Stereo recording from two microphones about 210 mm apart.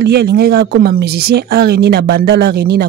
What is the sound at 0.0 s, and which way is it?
Speech, 50° right (ahead or behind).